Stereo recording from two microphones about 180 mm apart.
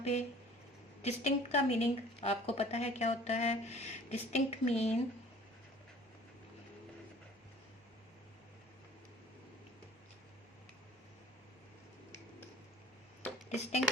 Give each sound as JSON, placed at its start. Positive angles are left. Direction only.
{"t": 0.0, "sound": "a woman's voice", "side_deg": 40}
{"t": 13.5, "sound": "a woman's voice", "side_deg": 35}